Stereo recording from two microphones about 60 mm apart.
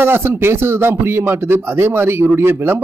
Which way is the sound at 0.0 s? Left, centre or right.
Right.